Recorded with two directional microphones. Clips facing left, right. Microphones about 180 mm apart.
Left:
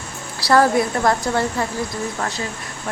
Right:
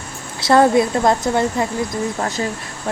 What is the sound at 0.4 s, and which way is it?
A woman's voice, 20° right (ahead or behind).